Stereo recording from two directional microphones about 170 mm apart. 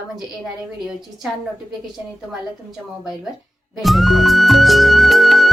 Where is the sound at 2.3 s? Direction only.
5° right (ahead or behind).